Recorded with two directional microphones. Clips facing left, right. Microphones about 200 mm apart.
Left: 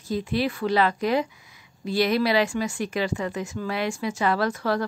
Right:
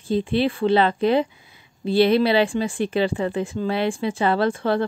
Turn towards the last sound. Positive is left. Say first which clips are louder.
# right 4 dB
turn(degrees=-25)  # may be behind; listen again after turning